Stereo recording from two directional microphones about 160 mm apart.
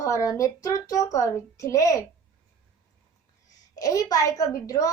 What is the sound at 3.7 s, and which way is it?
Speech, 20° left (ahead or behind).